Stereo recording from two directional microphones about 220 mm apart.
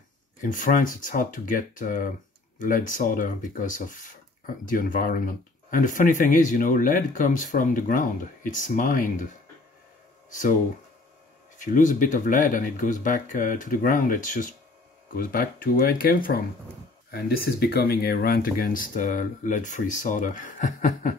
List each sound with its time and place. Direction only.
0.4 s speech: 35° left (ahead or behind)
11.5 s speech: 35° left (ahead or behind)